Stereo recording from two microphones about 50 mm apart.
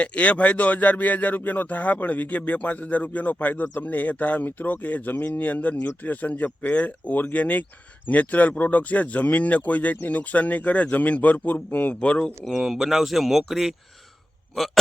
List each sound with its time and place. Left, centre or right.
0.0 s speech: left
11.9 s speech: left
12.5 s speech: centre